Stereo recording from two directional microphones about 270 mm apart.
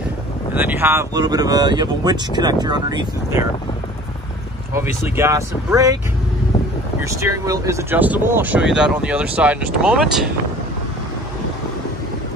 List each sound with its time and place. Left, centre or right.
0.6 s speech: centre
5.0 s speech: centre
7.0 s speech: centre